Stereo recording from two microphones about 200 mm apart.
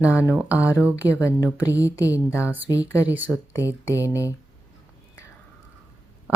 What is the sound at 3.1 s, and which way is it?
Speech, 10° right (ahead or behind).